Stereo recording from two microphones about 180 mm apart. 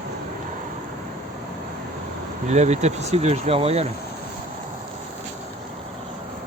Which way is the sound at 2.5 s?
40° right (ahead or behind).